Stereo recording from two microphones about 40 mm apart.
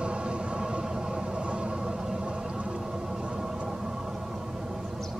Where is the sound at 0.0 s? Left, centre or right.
Right.